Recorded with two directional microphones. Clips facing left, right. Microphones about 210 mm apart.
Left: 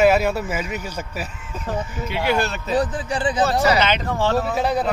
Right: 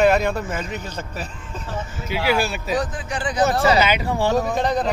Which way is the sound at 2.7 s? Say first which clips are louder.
Left 6 dB; 30° left (ahead or behind).